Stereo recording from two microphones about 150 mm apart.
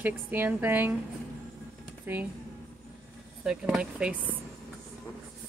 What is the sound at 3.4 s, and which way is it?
Speech, 5° right (ahead or behind).